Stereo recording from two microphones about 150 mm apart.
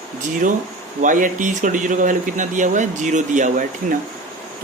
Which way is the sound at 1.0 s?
60° right (ahead or behind).